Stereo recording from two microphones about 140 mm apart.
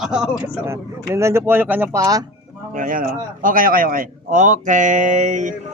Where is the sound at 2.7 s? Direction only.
75° right (ahead or behind).